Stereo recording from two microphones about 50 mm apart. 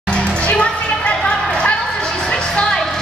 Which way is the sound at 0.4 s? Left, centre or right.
Left.